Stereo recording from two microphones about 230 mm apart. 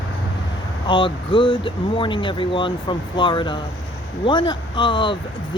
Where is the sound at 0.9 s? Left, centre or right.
Left.